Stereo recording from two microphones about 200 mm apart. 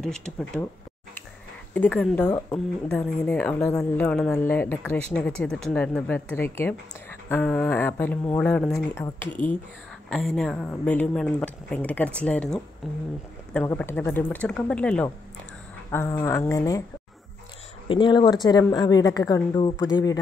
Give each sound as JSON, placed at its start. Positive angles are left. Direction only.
{"t": 0.0, "sound": "speech", "side_deg": 5}
{"t": 1.7, "sound": "speech", "side_deg": 5}
{"t": 17.8, "sound": "a woman's voice", "side_deg": 25}